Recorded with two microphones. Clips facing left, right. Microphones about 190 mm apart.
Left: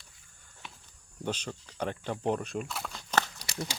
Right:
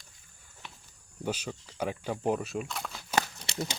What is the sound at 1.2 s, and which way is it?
Speech, 5° right (ahead or behind).